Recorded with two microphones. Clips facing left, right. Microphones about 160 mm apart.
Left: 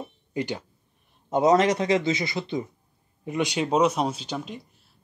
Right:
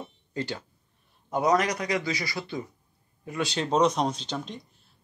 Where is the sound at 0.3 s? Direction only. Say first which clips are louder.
Left 4 dB; 15° left (ahead or behind).